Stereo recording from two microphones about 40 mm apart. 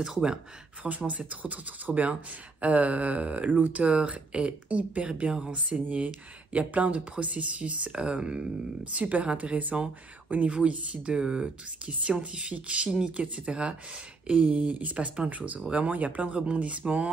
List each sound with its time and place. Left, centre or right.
0.8 s speech: right
3.8 s speech: right